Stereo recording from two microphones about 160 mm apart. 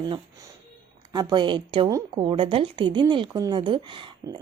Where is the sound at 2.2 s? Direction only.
35° right (ahead or behind).